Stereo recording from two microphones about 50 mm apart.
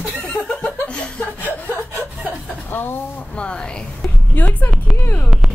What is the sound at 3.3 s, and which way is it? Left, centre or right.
Speech, centre.